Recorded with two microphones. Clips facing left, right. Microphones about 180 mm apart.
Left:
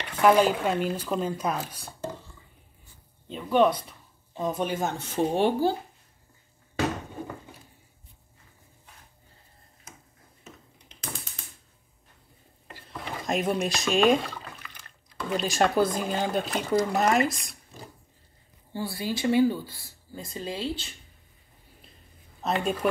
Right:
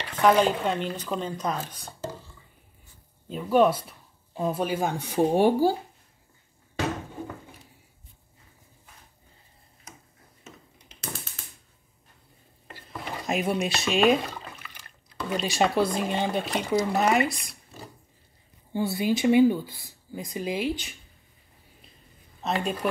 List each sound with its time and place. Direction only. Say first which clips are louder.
0.1 s speech: left 1 dB; 10° left (ahead or behind)
3.3 s speech: right 1 dB; 5° right (ahead or behind)
12.8 s drip: even; centre (ahead or behind)
14.6 s speech: even; 10° right (ahead or behind)
18.7 s speech: right 6 dB; 20° right (ahead or behind)
22.4 s speech: left 1 dB; centre (ahead or behind)